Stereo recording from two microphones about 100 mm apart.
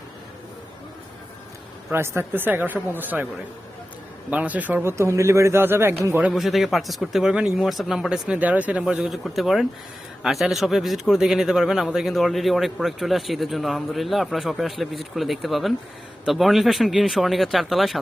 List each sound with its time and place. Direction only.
1.9 s a man's voice: 25° right (ahead or behind)
4.3 s a man's voice: 15° right (ahead or behind)
6.3 s a man's voice: centre (ahead or behind)
8.4 s a man's voice: 15° right (ahead or behind)